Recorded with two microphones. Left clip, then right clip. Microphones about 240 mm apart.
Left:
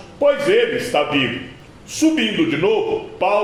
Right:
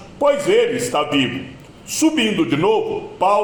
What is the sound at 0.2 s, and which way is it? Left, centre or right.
A man's voice, right.